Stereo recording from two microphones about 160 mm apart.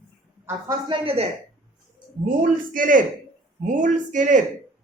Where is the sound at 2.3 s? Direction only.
55° right (ahead or behind).